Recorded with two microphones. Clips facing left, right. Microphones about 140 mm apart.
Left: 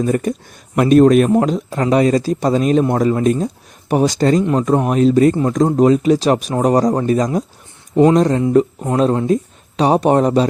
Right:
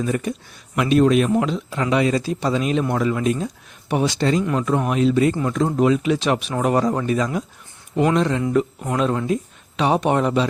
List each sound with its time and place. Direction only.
0.0 s a man's voice: 45° left (ahead or behind)